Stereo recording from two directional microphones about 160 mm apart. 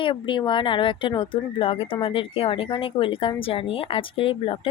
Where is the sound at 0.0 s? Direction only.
30° left (ahead or behind).